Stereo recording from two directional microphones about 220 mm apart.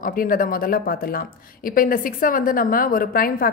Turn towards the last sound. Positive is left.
turn(degrees=40)  # may be behind; listen again after turning